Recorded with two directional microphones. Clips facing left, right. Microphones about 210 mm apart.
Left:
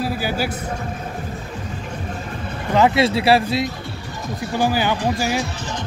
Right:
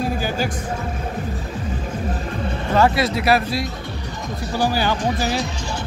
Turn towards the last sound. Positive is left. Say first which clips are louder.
# left 1 dB
turn(degrees=15)  # may be behind; listen again after turning